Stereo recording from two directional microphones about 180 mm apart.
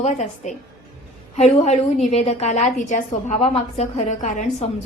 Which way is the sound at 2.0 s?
35° left (ahead or behind).